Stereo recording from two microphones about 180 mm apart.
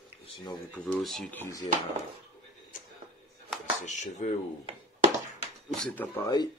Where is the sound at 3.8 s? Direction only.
40° left (ahead or behind).